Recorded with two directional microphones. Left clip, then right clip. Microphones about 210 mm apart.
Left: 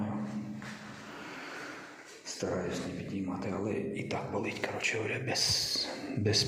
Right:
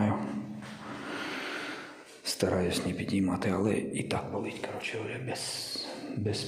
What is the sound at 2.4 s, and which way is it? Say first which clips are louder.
Speech: right 5 dB; 40° right (ahead or behind).